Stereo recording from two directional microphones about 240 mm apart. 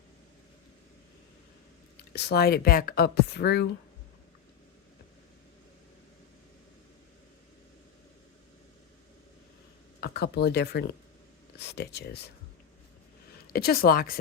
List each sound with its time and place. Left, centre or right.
2.0 s speech: left
10.0 s speech: left
13.5 s speech: left